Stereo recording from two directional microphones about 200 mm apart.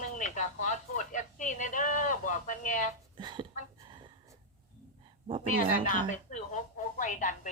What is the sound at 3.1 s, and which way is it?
Speech, 25° right (ahead or behind).